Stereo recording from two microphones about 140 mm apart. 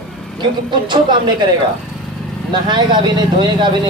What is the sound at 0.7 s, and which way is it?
Speech, 35° right (ahead or behind).